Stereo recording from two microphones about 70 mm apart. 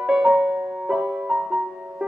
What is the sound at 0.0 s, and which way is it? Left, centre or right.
Music, centre.